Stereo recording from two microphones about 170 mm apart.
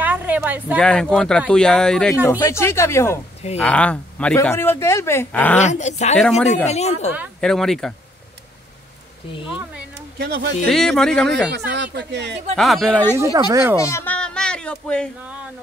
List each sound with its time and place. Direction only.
0.0 s a sound: 10° right (ahead or behind)
0.7 s speech: 5° left (ahead or behind)
2.2 s speech: 20° left (ahead or behind)
5.6 s speech: 45° left (ahead or behind)
6.1 s speech: centre (ahead or behind)
6.5 s speech: 40° left (ahead or behind)
7.3 s speech: 5° left (ahead or behind)
10.1 s speech: 80° right
10.7 s speech: 5° left (ahead or behind)
11.5 s speech: 85° right
12.5 s speech: centre (ahead or behind)
13.2 s speech: 20° right (ahead or behind)
13.7 s speech: 15° left (ahead or behind)